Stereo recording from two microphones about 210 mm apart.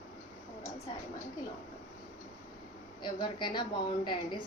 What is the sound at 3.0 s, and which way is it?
A woman's voice, 20° left (ahead or behind).